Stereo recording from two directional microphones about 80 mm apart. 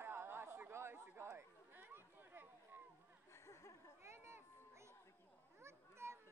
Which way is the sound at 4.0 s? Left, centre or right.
Right.